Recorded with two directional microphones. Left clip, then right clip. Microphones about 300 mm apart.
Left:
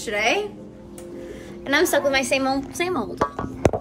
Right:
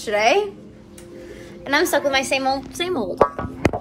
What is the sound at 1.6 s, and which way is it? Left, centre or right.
A woman's voice, centre.